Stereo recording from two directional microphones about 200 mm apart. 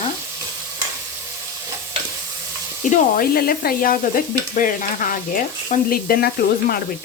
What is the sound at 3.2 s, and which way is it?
Stir, 45° left (ahead or behind).